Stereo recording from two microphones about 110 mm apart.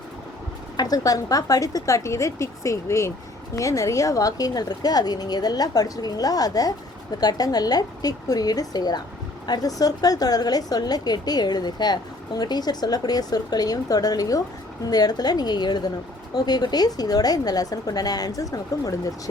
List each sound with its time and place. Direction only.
0.8 s a woman's voice: 35° left (ahead or behind)